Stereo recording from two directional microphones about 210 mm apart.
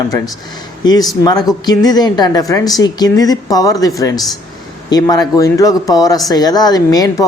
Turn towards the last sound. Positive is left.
turn(degrees=20)  # may be behind; listen again after turning